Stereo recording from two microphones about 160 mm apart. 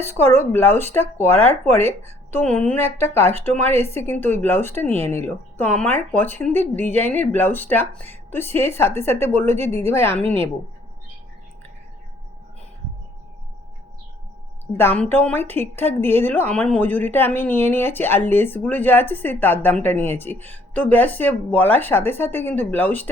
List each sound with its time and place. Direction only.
0.0 s a woman's voice: 15° left (ahead or behind)
14.8 s a woman's voice: 10° left (ahead or behind)